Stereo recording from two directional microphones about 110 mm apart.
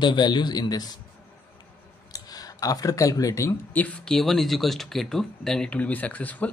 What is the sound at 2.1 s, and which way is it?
Speech, 35° left (ahead or behind).